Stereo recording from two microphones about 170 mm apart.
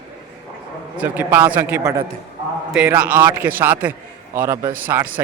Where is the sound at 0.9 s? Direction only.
10° right (ahead or behind).